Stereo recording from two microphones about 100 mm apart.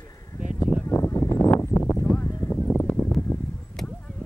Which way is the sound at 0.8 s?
25° left (ahead or behind).